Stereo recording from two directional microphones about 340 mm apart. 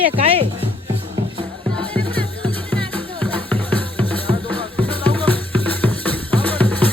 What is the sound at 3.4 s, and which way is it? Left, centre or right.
Music, centre.